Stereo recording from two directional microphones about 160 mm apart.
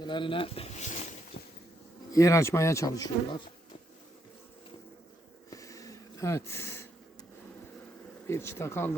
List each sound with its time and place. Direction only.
0.0 s speech: 30° left (ahead or behind); by 1.0 s 50° left (ahead or behind)
2.1 s speech: 20° left (ahead or behind)
5.5 s a sound: 20° left (ahead or behind)
8.3 s speech: 15° left (ahead or behind)